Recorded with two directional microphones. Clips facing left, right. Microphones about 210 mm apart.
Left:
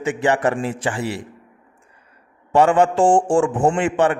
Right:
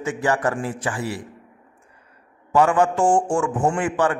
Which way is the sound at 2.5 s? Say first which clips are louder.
Left 3 dB; 25° left (ahead or behind).